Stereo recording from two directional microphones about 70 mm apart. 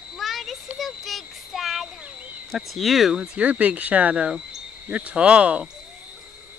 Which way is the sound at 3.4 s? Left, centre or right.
Right.